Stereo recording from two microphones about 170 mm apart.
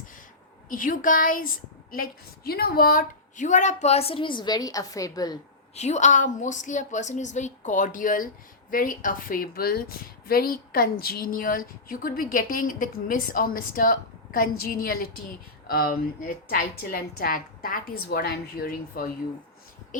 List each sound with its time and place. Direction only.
0.7 s a woman's voice: 55° left (ahead or behind); by 5.4 s 20° left (ahead or behind)
5.7 s a woman's voice: 40° left (ahead or behind); by 19.0 s 60° left (ahead or behind)